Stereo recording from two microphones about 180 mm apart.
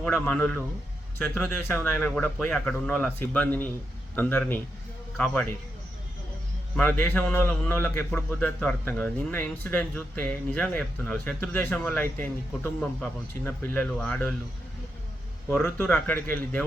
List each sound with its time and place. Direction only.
0.0 s speech: 10° left (ahead or behind)
6.7 s speech: 10° left (ahead or behind)
15.4 s speech: 15° left (ahead or behind)